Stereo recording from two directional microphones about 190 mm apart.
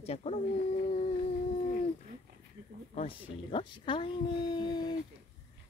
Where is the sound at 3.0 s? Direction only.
30° left (ahead or behind).